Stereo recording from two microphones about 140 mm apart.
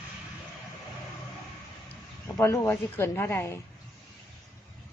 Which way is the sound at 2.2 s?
15° left (ahead or behind).